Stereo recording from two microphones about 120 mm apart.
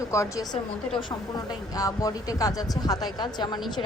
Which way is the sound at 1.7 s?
30° left (ahead or behind).